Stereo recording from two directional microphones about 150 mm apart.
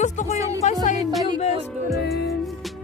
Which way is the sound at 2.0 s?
90° left.